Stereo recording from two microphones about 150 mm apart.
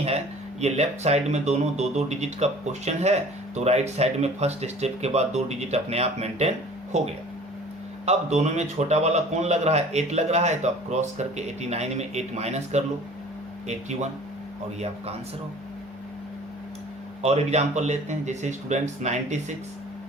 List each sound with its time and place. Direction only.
0.6 s speech: 45° right (ahead or behind)
14.8 s speech: 45° right (ahead or behind)
17.2 s speech: 45° right (ahead or behind)